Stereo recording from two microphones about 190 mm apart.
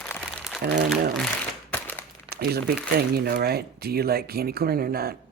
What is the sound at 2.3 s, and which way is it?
Crumpling, 55° right (ahead or behind).